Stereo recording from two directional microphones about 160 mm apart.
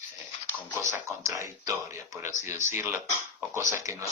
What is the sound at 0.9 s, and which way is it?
Speech, 15° right (ahead or behind).